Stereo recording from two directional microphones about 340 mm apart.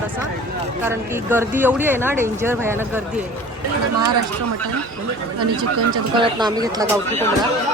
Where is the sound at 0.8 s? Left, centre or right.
Centre.